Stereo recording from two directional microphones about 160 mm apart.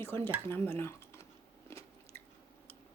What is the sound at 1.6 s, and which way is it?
Biting, 15° left (ahead or behind).